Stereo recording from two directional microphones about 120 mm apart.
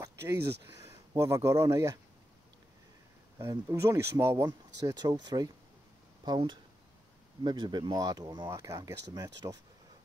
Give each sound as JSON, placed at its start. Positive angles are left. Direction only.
{"t": 0.0, "sound": "speech", "side_deg": -25}
{"t": 3.3, "sound": "speech", "side_deg": -20}
{"t": 4.5, "sound": "speech", "side_deg": -35}